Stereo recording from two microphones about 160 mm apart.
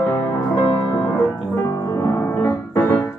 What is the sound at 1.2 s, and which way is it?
Piano, 15° left (ahead or behind).